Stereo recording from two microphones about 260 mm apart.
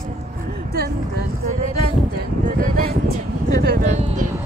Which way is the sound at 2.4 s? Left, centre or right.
Right.